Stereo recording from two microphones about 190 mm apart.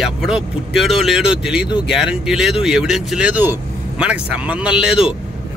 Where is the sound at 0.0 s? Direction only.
5° right (ahead or behind).